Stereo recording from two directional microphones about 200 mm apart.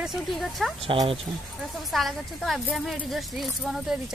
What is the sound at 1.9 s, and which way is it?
Speech, centre (ahead or behind).